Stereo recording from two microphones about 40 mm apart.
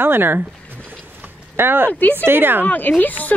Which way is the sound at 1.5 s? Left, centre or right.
Right.